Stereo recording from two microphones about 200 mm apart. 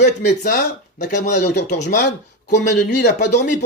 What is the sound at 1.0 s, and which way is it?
Speech, 40° left (ahead or behind).